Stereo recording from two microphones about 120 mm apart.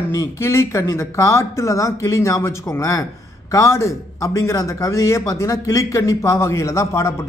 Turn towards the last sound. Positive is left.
turn(degrees=25)  # may be behind; listen again after turning